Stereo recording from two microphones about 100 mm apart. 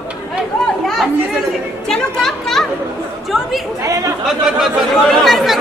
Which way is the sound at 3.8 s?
30° right (ahead or behind).